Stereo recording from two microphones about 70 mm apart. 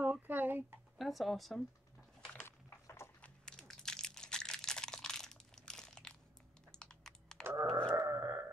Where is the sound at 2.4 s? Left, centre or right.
Left.